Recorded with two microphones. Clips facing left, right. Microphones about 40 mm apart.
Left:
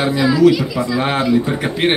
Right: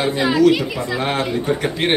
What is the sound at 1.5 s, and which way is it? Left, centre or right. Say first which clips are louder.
Speech: left 1 dB; centre.